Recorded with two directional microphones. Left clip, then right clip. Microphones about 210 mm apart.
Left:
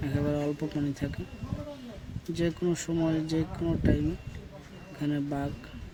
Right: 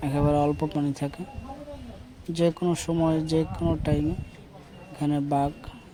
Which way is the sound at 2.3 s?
25° right (ahead or behind).